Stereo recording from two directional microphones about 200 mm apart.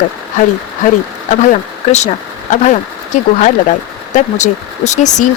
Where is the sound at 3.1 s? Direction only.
40° left (ahead or behind).